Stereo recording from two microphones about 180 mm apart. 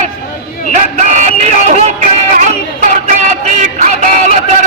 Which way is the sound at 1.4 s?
40° right (ahead or behind).